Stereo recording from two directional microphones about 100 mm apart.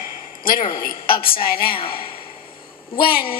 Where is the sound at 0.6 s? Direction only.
55° left (ahead or behind).